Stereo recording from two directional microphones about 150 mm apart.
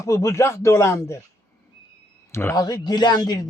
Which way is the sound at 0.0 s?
20° left (ahead or behind).